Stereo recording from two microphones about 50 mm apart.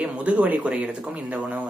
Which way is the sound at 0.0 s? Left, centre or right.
Right.